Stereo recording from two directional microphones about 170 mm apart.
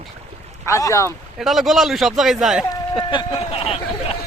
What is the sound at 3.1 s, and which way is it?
Speech, 30° left (ahead or behind).